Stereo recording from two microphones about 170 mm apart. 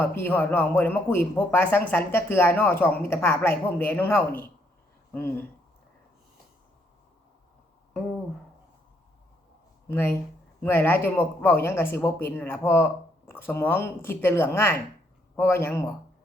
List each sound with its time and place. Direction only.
0.0 s speech: 10° left (ahead or behind)
9.9 s speech: 15° left (ahead or behind)